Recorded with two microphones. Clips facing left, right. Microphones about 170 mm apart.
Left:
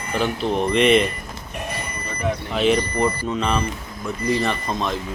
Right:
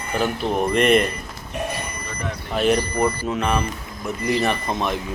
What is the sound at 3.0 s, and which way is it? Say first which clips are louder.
Speech: even; 10° right (ahead or behind).